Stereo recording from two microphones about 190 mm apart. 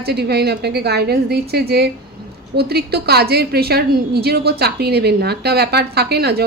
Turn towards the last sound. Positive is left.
turn(degrees=-55)  # may be behind; listen again after turning